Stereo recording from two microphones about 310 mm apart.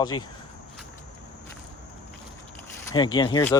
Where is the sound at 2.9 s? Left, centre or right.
Centre.